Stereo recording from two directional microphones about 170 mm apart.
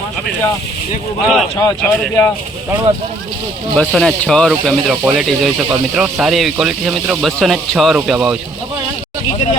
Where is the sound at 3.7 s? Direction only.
Centre (ahead or behind).